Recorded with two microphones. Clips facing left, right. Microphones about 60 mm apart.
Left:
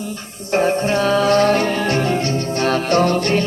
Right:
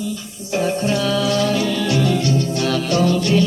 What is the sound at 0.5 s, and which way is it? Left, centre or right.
Music, left.